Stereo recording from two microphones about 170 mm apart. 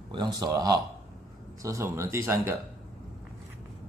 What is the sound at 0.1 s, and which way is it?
Speech, 25° right (ahead or behind).